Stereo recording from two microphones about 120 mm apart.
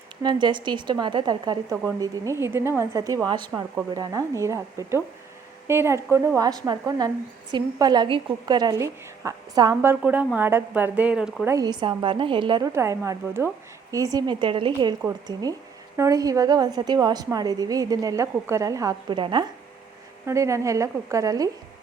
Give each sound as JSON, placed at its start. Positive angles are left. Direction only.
{"t": 0.2, "sound": "a woman's voice", "side_deg": -40}
{"t": 2.0, "sound": "a woman's voice", "side_deg": -25}
{"t": 3.2, "sound": "a woman's voice", "side_deg": -40}
{"t": 9.8, "sound": "speech", "side_deg": -15}
{"t": 11.6, "sound": "a woman's voice", "side_deg": -35}
{"t": 12.6, "sound": "a woman's voice", "side_deg": -25}
{"t": 19.0, "sound": "a woman's voice", "side_deg": -40}
{"t": 20.2, "sound": "a woman's voice", "side_deg": -25}